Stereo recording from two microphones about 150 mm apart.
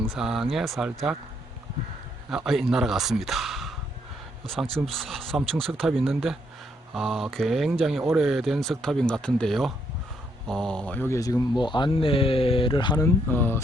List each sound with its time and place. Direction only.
0.1 s speech: 5° right (ahead or behind)
2.3 s speech: centre (ahead or behind)
11.1 s speech: 20° left (ahead or behind)
13.3 s speech: 15° left (ahead or behind)